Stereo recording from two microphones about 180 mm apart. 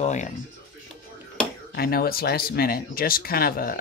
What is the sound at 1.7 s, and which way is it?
Speech, 55° left (ahead or behind).